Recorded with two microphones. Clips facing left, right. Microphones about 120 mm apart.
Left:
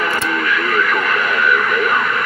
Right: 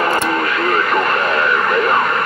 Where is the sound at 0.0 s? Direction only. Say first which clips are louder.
Right 3 dB; 40° right (ahead or behind).